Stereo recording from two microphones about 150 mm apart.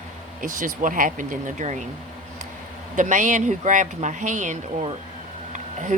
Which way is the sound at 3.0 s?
55° right (ahead or behind).